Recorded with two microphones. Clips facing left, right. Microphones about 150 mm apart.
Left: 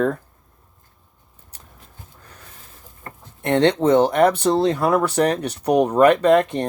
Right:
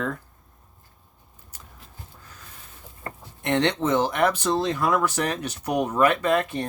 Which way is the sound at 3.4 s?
35° left (ahead or behind).